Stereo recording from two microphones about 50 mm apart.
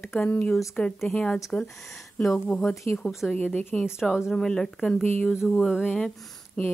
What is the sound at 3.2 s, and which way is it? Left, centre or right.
Speech, centre.